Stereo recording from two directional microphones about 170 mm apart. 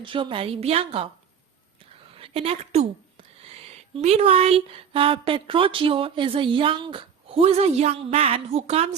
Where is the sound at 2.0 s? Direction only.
35° right (ahead or behind).